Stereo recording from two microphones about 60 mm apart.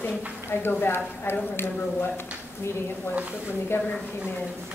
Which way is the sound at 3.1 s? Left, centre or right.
Right.